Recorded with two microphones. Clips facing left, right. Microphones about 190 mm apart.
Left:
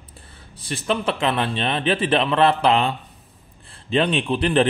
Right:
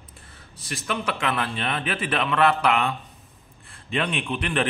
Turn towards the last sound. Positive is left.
turn(degrees=30)  # may be behind; listen again after turning